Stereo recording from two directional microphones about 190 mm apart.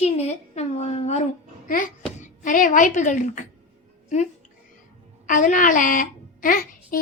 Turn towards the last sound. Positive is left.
turn(degrees=50)  # may be behind; listen again after turning